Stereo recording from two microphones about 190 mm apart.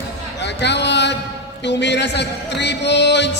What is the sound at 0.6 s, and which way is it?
Speech, 65° left (ahead or behind).